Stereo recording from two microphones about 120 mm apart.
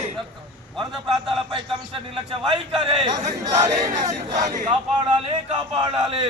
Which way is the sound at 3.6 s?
35° right (ahead or behind).